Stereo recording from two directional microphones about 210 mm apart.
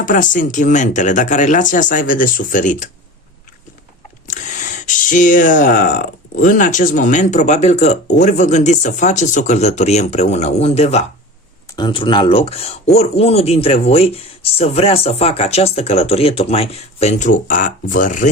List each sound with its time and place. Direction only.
0.0 s speech: 40° left (ahead or behind)
4.3 s speech: 35° left (ahead or behind)